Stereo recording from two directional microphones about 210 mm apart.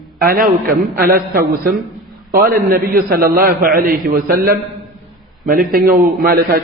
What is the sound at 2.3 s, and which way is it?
A man's voice, 45° right (ahead or behind).